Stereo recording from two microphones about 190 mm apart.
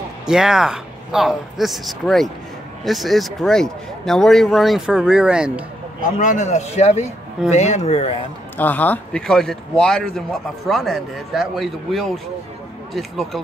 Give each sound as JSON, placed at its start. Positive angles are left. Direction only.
{"t": 0.3, "sound": "speech", "side_deg": -5}
{"t": 6.0, "sound": "a man's voice", "side_deg": 40}
{"t": 8.5, "sound": "speech", "side_deg": 10}